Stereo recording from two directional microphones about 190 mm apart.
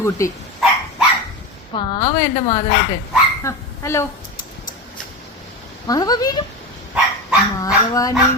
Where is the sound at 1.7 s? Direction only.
20° left (ahead or behind).